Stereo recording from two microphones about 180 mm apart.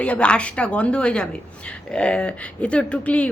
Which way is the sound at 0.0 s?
5° left (ahead or behind).